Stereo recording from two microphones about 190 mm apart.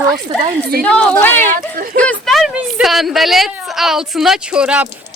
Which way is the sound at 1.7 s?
50° right (ahead or behind).